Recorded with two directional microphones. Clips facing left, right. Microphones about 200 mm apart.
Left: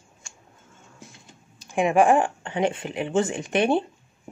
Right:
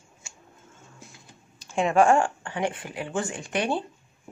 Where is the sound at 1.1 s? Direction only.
20° left (ahead or behind).